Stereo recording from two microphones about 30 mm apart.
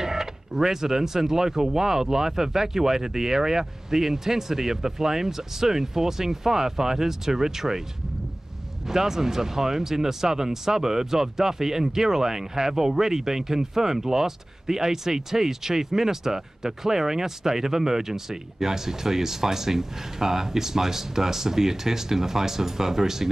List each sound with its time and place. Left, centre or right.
0.0 s speech: centre
8.8 s speech: centre